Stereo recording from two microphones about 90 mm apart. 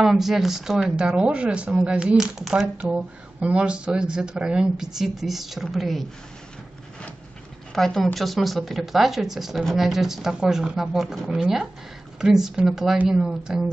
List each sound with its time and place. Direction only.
0.0 s speech: 5° right (ahead or behind)
7.7 s speech: 5° left (ahead or behind)
12.9 s speech: 15° right (ahead or behind)
13.2 s speech: 5° right (ahead or behind)